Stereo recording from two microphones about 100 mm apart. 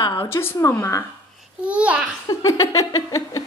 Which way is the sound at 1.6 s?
10° right (ahead or behind).